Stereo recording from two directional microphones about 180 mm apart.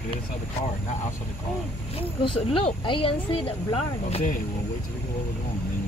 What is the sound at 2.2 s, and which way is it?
Speech, 30° left (ahead or behind).